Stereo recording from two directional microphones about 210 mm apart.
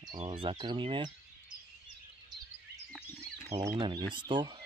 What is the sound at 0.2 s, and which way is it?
Speech, 30° right (ahead or behind).